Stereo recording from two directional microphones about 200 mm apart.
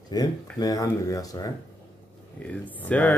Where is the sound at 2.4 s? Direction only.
5° left (ahead or behind).